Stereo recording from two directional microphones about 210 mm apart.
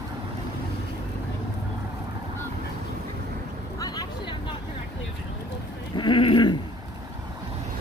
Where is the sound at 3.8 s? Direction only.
20° left (ahead or behind).